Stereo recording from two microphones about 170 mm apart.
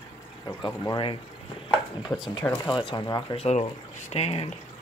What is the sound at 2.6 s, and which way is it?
Speech, 30° left (ahead or behind).